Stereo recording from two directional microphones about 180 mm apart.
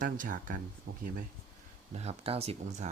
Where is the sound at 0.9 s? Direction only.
60° right (ahead or behind).